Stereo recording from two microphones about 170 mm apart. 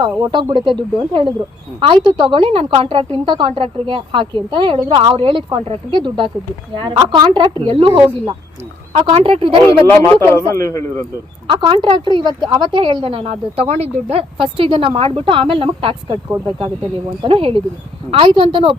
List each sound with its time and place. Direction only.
0.0 s a woman's voice: 25° right (ahead or behind)
7.9 s speech: 10° right (ahead or behind)
8.9 s a woman's voice: 40° right (ahead or behind)
9.6 s speech: 15° left (ahead or behind)
11.4 s a woman's voice: 25° right (ahead or behind)